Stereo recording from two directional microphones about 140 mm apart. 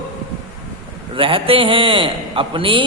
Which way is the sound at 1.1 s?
40° right (ahead or behind).